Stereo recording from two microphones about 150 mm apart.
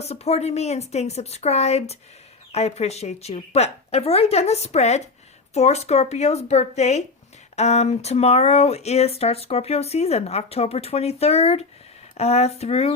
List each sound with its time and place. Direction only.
0.0 s speech: 45° left (ahead or behind)